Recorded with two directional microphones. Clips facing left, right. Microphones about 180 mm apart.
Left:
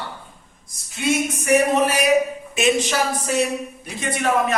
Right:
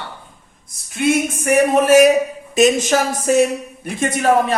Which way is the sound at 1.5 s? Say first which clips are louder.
Right 5 dB; 45° right (ahead or behind).